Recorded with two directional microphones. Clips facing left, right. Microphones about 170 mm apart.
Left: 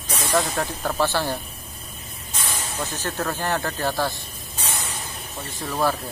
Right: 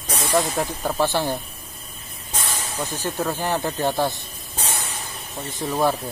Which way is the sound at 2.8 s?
15° right (ahead or behind).